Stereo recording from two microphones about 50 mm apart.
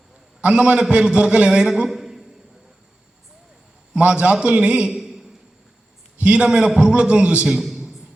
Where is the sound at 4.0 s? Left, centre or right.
Right.